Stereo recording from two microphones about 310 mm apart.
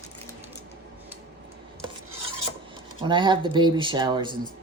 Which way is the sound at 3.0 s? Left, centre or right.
Centre.